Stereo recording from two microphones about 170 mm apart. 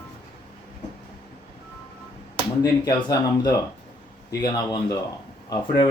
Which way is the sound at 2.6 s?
20° left (ahead or behind).